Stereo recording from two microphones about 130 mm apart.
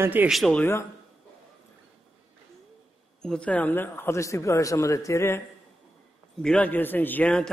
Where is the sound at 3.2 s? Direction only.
5° left (ahead or behind).